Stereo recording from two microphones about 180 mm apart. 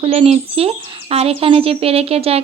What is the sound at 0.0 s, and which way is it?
Speech, 35° right (ahead or behind).